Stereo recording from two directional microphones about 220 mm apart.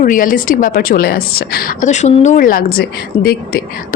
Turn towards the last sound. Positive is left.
turn(degrees=45)  # may be behind; listen again after turning